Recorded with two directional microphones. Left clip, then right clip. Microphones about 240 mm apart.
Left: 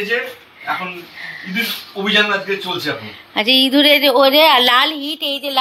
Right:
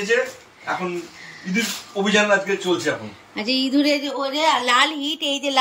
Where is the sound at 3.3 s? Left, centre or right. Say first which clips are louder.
Left 8 dB; centre.